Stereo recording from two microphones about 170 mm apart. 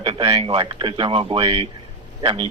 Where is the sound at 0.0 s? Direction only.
30° right (ahead or behind).